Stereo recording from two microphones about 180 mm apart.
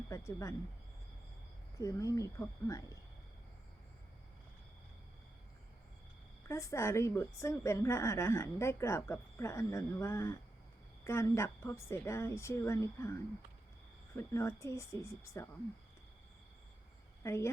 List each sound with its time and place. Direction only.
0.1 s speech: 15° left (ahead or behind)
1.8 s speech: 20° left (ahead or behind)
6.5 s a woman's voice: 15° left (ahead or behind)
14.2 s a woman's voice: 15° left (ahead or behind)
17.2 s a woman's voice: 15° left (ahead or behind)